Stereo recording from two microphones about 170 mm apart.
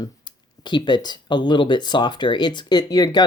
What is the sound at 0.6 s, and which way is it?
Speech, 25° left (ahead or behind).